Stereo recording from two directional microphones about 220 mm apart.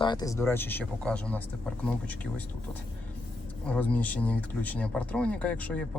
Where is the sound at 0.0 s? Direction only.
20° left (ahead or behind).